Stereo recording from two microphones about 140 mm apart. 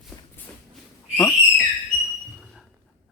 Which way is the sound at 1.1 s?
15° left (ahead or behind).